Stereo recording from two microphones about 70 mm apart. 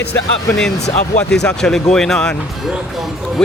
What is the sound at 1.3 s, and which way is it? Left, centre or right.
Speech, centre.